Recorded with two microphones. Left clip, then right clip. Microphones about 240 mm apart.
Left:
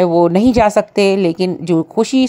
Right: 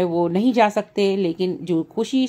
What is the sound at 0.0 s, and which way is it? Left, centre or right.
A woman's voice, left.